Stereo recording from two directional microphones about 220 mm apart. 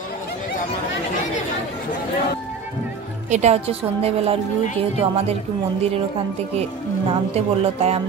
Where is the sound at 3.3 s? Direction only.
30° right (ahead or behind).